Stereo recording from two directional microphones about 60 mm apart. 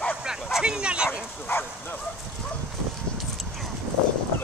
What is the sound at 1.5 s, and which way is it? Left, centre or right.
Speech, left.